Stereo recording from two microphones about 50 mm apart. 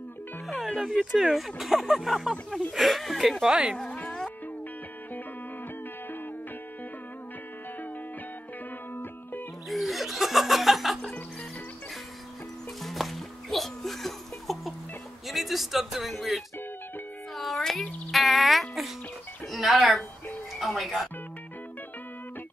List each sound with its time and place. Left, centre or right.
0.5 s speech: centre
3.4 s speech: centre
3.9 s music: left
9.7 s snicker: centre
12.8 s music: centre
15.2 s a sound: centre
18.1 s music: centre